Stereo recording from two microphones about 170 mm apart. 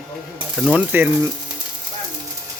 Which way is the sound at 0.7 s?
10° right (ahead or behind).